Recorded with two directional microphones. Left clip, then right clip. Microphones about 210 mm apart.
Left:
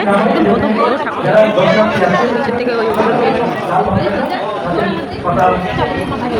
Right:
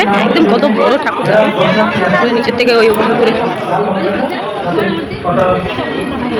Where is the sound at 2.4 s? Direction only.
15° right (ahead or behind).